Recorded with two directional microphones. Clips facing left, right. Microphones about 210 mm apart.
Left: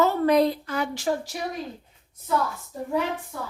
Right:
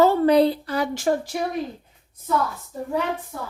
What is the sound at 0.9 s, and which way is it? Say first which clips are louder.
Speech: right 4 dB; 50° right (ahead or behind).